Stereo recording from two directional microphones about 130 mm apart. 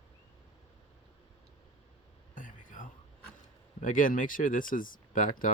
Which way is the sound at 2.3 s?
90° left.